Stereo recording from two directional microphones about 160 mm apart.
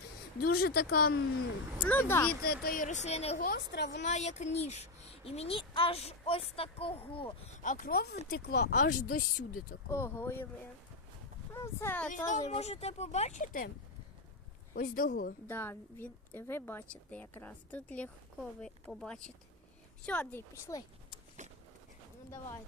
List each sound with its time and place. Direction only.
0.4 s speech: 75° left (ahead or behind)
1.8 s a woman's voice: 10° left (ahead or behind)
2.4 s speech: 75° left (ahead or behind); by 3.3 s 40° left (ahead or behind)
3.4 s a woman's voice: 80° left
4.0 s a child's voice: 45° left (ahead or behind)
7.6 s speech: 55° left (ahead or behind); by 8.1 s 75° left (ahead or behind)
8.3 s speech: 90° left; by 9.7 s 65° left (ahead or behind)
9.9 s a woman's voice: 15° left (ahead or behind)
11.5 s speech: 15° left (ahead or behind)
12.3 s speech: 45° left (ahead or behind)
14.7 s speech: 55° left (ahead or behind)
15.4 s a woman's voice: 10° left (ahead or behind)
21.4 s a sound: 50° right (ahead or behind)